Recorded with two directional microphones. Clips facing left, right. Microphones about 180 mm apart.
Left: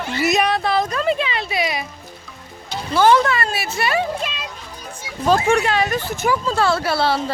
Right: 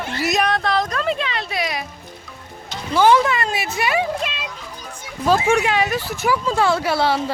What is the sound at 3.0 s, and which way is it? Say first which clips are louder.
Speech: even; 10° right (ahead or behind).